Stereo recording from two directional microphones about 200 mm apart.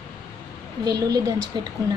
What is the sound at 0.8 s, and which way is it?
Speech, 20° right (ahead or behind).